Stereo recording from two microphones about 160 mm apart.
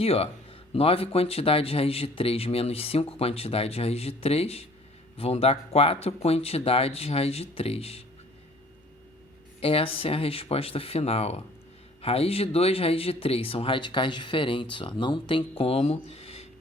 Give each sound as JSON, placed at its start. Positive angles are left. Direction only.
{"t": 0.0, "sound": "speech", "side_deg": 40}
{"t": 9.6, "sound": "speech", "side_deg": 35}